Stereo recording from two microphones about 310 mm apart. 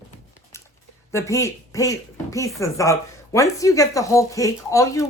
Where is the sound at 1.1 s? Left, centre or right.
Centre.